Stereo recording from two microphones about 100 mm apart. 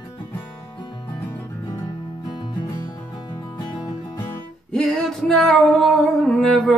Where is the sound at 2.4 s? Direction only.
40° left (ahead or behind).